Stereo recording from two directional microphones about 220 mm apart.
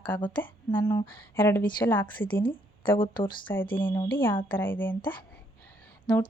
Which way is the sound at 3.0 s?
20° left (ahead or behind).